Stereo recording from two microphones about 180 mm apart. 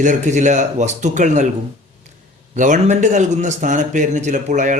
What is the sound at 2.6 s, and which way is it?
A man's voice, 45° right (ahead or behind).